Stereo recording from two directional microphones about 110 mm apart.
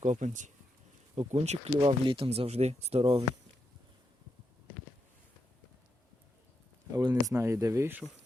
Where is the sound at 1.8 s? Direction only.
50° right (ahead or behind).